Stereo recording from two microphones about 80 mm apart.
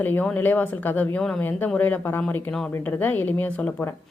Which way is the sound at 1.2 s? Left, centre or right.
Centre.